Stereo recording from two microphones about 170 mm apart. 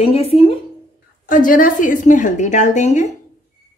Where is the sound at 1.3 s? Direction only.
50° left (ahead or behind).